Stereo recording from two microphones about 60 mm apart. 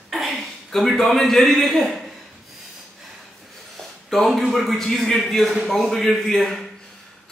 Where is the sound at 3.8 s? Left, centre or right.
Centre.